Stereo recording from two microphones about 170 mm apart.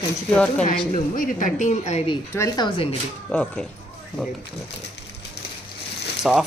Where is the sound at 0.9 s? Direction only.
50° left (ahead or behind).